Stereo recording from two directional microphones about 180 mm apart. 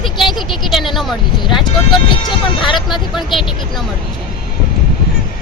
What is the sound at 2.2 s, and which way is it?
Speech, 25° left (ahead or behind).